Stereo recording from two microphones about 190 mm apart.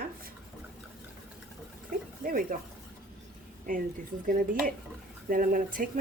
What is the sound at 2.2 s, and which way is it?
Speech, 45° right (ahead or behind).